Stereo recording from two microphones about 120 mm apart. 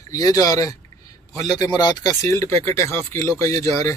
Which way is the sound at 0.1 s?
30° left (ahead or behind).